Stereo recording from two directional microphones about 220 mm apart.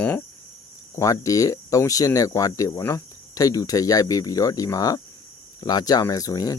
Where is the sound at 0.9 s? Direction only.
15° left (ahead or behind).